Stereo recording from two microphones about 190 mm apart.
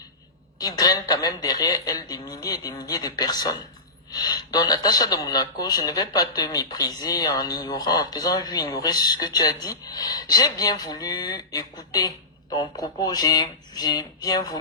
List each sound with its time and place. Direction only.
0.6 s speech: 20° left (ahead or behind)